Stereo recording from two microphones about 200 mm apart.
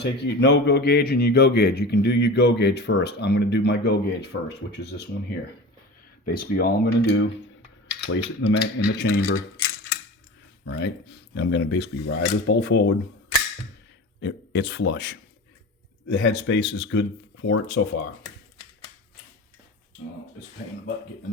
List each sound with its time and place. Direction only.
0.0 s a man's voice: 60° left (ahead or behind)
11.3 s a man's voice: 60° left (ahead or behind)
14.2 s a man's voice: 60° left (ahead or behind)